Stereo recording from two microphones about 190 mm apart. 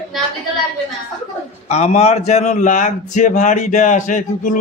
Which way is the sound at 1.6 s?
35° left (ahead or behind).